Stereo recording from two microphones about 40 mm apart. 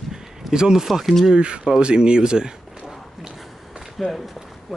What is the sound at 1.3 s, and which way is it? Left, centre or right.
Speech, right.